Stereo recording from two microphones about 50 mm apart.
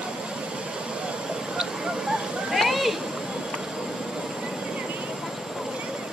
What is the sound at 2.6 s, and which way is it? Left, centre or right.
Cat, centre.